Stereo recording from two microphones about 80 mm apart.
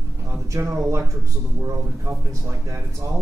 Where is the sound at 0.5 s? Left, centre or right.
Right.